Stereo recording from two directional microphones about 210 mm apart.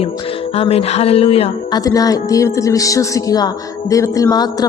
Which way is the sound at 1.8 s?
15° left (ahead or behind).